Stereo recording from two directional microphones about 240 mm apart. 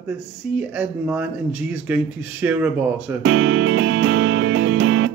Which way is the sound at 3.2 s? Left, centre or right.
Right.